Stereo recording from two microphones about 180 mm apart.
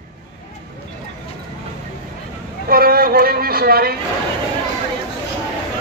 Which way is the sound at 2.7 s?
55° right (ahead or behind).